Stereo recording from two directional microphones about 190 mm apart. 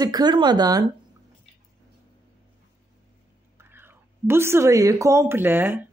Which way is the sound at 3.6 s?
10° right (ahead or behind).